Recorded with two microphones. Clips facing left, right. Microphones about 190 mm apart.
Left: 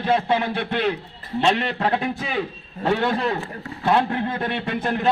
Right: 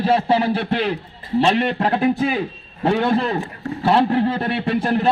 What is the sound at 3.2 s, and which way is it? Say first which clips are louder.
A man's voice: right 3 dB; 30° right (ahead or behind).